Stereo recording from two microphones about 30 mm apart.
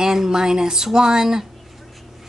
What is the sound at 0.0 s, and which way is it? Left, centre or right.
Speech, centre.